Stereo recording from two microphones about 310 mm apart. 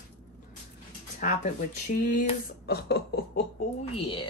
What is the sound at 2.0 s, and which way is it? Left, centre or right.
A woman's voice, left.